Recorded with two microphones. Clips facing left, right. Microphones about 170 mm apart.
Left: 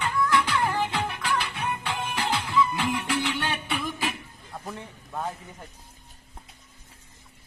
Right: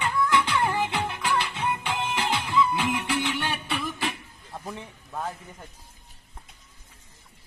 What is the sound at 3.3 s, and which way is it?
Music, 5° right (ahead or behind).